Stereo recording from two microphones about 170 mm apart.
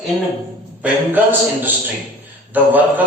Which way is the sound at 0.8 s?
10° right (ahead or behind).